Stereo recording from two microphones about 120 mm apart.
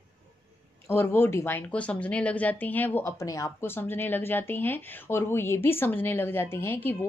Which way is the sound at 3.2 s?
25° left (ahead or behind).